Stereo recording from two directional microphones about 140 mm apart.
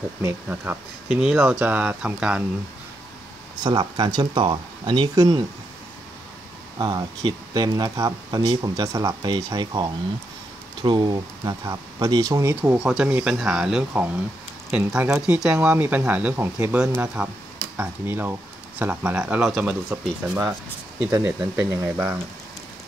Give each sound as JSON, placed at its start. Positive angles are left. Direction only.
{"t": 0.2, "sound": "speech", "side_deg": -15}
{"t": 1.0, "sound": "speech", "side_deg": -5}
{"t": 1.6, "sound": "speech", "side_deg": -10}
{"t": 3.6, "sound": "speech", "side_deg": -30}
{"t": 6.8, "sound": "speech", "side_deg": -30}
{"t": 12.7, "sound": "speech", "side_deg": -5}
{"t": 21.5, "sound": "speech", "side_deg": -15}